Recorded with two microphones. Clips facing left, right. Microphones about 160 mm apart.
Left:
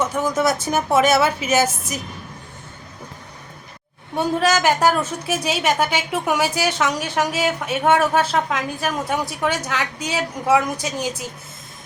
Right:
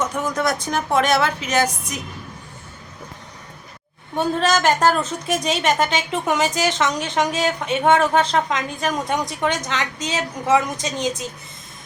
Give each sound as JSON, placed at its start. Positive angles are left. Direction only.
{"t": 0.0, "sound": "a woman's voice", "side_deg": 5}
{"t": 4.2, "sound": "a woman's voice", "side_deg": 10}